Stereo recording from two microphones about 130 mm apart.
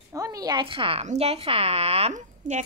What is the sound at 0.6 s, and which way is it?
Speech, 45° right (ahead or behind).